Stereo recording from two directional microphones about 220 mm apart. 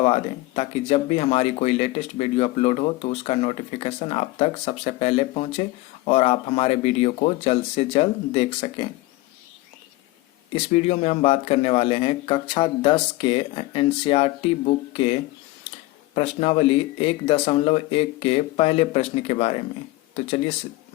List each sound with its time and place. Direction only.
0.0 s speech: 25° left (ahead or behind)
10.5 s speech: 30° left (ahead or behind)
16.1 s speech: 25° left (ahead or behind)